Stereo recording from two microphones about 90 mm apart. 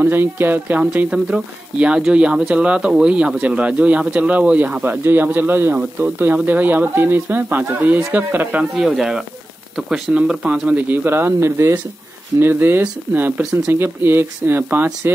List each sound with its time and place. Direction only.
0.0 s speech: 25° right (ahead or behind)
8.7 s speech: 5° right (ahead or behind); by 15.1 s 25° right (ahead or behind)